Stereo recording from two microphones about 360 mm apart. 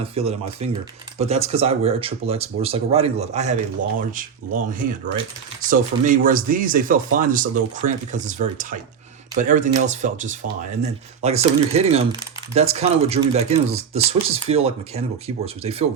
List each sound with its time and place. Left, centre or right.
0.0 s speech: centre